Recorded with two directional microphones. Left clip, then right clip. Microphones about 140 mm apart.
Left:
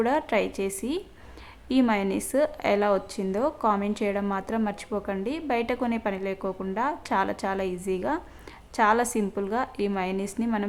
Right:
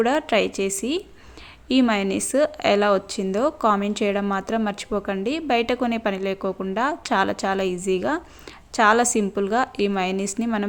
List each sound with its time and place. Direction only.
0.0 s a woman's voice: 20° right (ahead or behind)